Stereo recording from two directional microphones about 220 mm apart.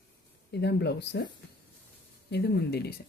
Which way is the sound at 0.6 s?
50° left (ahead or behind).